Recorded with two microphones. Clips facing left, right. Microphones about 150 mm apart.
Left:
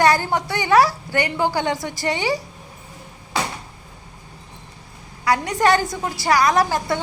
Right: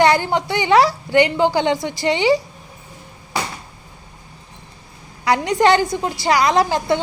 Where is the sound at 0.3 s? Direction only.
20° right (ahead or behind).